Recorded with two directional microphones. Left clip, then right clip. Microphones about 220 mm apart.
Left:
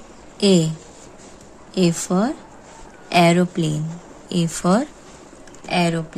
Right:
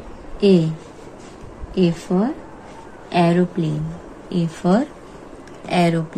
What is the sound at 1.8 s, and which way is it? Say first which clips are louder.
A woman's voice: even; 45° left (ahead or behind).